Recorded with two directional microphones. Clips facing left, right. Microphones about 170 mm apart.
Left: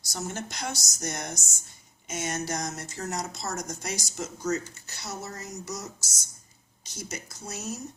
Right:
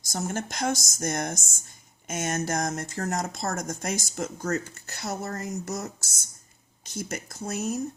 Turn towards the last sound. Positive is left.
turn(degrees=-55)  # may be behind; listen again after turning